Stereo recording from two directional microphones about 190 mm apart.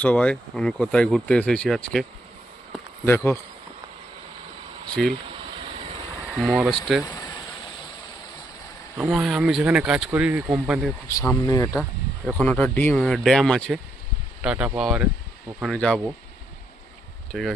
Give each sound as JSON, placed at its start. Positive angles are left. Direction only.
{"t": 0.0, "sound": "speech", "side_deg": 5}
{"t": 2.7, "sound": "a sound", "side_deg": 10}
{"t": 5.0, "sound": "speech", "side_deg": 0}
{"t": 5.5, "sound": "vehicle", "side_deg": -25}
{"t": 6.3, "sound": "speech", "side_deg": -5}
{"t": 7.0, "sound": "vehicle", "side_deg": 20}
{"t": 9.0, "sound": "speech", "side_deg": -5}
{"t": 11.2, "sound": "speech", "side_deg": 15}
{"t": 11.7, "sound": "speech", "side_deg": -5}
{"t": 17.3, "sound": "speech", "side_deg": 0}